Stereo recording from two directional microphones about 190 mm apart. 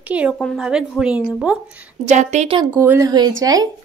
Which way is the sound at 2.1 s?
35° right (ahead or behind).